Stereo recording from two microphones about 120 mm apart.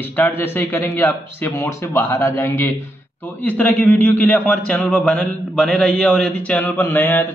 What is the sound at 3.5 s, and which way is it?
A man's voice, 10° left (ahead or behind).